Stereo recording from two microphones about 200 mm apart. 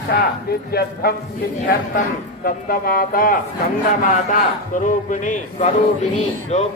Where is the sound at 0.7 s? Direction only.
50° left (ahead or behind).